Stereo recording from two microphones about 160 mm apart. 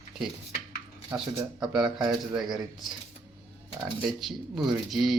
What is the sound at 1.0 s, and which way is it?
Speech, 5° right (ahead or behind).